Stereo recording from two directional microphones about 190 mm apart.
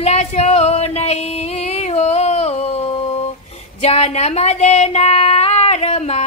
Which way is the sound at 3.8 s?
35° left (ahead or behind).